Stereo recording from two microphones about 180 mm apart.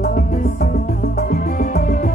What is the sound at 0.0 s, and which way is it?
Music, 50° left (ahead or behind).